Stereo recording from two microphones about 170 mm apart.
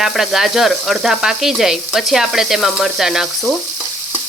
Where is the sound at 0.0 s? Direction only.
Centre (ahead or behind).